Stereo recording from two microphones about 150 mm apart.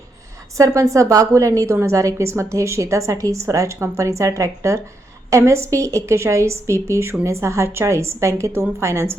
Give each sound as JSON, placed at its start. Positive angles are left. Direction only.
{"t": 0.5, "sound": "a woman's voice", "side_deg": -20}